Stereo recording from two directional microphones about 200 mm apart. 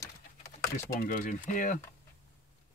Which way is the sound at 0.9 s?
40° left (ahead or behind).